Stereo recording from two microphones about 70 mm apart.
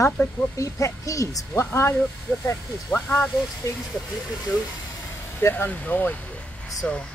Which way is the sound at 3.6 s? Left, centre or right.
Left.